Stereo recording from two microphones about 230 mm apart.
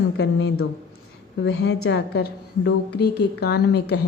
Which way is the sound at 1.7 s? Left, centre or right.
Left.